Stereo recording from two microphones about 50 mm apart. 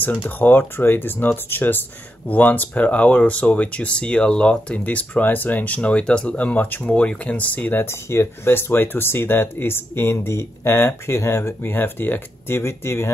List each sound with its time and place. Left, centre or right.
0.0 s speech: left
5.8 s speech: left
6.9 s speech: left
7.8 s speech: left